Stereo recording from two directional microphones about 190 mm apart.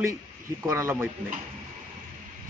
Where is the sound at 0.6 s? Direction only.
15° right (ahead or behind).